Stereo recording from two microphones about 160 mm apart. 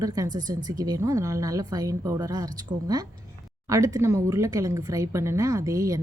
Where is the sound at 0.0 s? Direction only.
20° right (ahead or behind).